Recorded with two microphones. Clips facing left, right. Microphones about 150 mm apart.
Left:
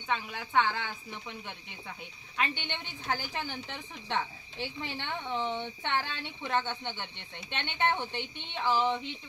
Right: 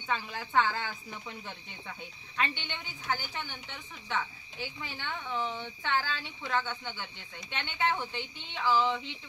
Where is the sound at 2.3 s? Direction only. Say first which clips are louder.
Left 1 dB; 15° left (ahead or behind).